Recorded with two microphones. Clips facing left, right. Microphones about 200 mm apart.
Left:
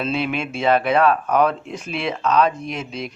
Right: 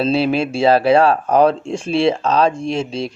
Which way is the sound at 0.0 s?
35° right (ahead or behind).